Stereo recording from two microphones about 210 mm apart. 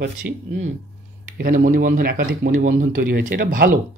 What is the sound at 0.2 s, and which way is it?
Speech, 50° right (ahead or behind).